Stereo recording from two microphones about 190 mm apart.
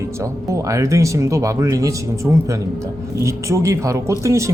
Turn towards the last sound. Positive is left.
turn(degrees=-15)  # may be behind; listen again after turning